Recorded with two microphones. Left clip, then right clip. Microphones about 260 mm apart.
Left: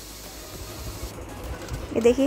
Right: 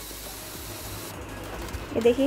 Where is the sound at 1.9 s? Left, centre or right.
Centre.